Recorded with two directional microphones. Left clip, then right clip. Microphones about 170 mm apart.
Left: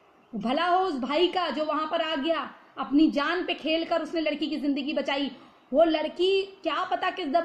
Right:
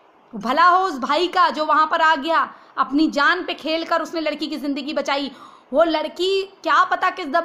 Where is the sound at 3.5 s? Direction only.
45° right (ahead or behind).